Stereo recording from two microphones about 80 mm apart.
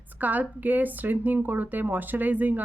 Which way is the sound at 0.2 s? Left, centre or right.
Right.